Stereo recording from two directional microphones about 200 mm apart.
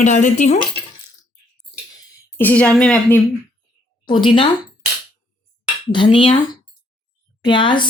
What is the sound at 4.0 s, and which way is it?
Speech, 25° left (ahead or behind).